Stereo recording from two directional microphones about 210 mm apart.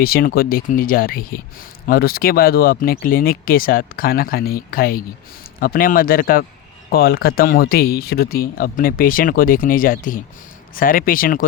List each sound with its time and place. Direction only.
0.0 s speech: 45° left (ahead or behind)